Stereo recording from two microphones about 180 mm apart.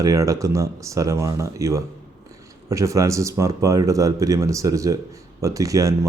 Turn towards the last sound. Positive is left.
turn(degrees=-20)  # may be behind; listen again after turning